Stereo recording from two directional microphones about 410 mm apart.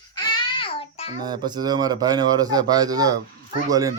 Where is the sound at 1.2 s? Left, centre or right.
Centre.